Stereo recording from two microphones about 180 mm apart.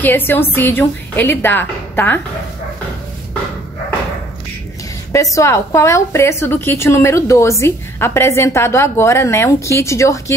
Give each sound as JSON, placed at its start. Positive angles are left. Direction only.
{"t": 0.0, "sound": "a woman's voice", "side_deg": 10}
{"t": 5.1, "sound": "a woman's voice", "side_deg": 15}